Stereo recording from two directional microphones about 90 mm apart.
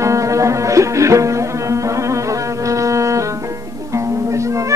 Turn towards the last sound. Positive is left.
turn(degrees=-35)  # may be behind; listen again after turning